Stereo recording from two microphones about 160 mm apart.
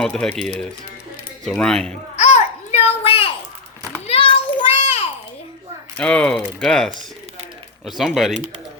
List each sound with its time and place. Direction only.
0.0 s speech: 5° left (ahead or behind)
2.1 s babbling: 45° left (ahead or behind)
4.0 s a sound: 35° left (ahead or behind)
6.0 s speech: 5° left (ahead or behind)